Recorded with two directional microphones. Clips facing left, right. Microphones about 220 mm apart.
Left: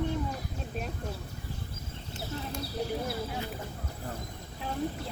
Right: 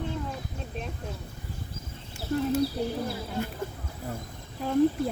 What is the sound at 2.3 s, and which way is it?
Speech, 55° right (ahead or behind).